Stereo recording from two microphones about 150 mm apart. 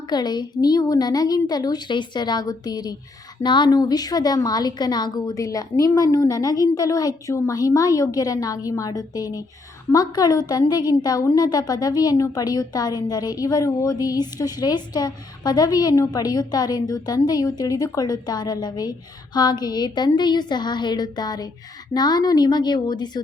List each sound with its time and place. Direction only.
0.1 s a woman's voice: 30° left (ahead or behind)